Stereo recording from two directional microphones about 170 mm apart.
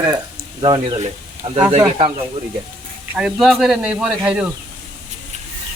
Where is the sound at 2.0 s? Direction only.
30° right (ahead or behind).